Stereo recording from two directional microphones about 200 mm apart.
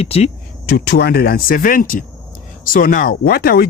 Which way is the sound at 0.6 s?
55° left (ahead or behind).